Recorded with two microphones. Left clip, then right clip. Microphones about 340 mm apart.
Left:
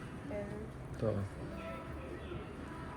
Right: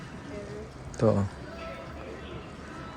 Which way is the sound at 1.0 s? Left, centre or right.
Right.